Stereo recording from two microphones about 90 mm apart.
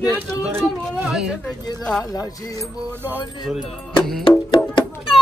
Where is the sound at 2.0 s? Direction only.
40° left (ahead or behind).